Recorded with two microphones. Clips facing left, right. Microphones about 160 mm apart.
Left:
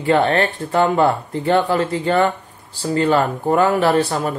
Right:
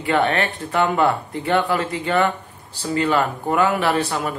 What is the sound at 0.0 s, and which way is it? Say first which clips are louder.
Speech: left 4 dB; 35° left (ahead or behind).